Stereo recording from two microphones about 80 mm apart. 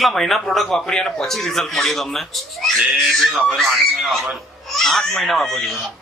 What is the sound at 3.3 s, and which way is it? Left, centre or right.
Speech, centre.